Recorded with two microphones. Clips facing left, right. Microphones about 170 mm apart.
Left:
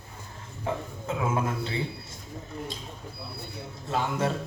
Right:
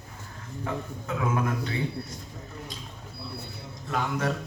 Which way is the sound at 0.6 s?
25° left (ahead or behind).